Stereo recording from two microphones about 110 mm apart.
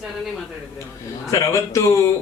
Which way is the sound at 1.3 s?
30° left (ahead or behind).